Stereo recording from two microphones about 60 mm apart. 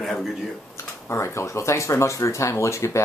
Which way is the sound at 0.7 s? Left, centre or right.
Left.